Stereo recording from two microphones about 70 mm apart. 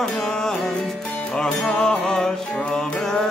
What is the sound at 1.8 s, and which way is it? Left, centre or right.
Music, centre.